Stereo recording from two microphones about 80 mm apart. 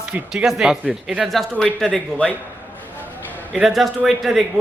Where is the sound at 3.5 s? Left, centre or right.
Centre.